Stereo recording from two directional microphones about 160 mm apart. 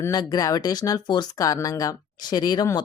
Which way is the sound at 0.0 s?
25° left (ahead or behind).